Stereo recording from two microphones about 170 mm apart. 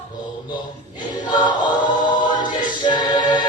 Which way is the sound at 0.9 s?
25° left (ahead or behind).